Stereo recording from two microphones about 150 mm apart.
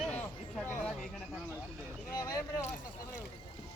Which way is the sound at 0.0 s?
5° left (ahead or behind).